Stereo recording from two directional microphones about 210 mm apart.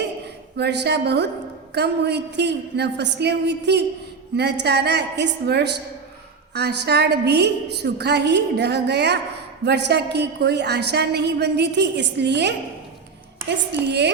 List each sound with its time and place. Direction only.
0.5 s a woman's voice: 55° right (ahead or behind)